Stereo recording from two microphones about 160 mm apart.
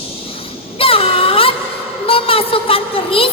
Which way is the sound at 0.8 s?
35° left (ahead or behind).